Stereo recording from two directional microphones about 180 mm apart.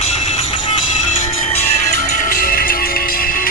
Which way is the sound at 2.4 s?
50° left (ahead or behind).